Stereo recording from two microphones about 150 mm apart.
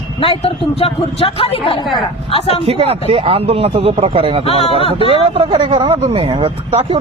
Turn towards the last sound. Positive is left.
turn(degrees=-40)  # may be behind; listen again after turning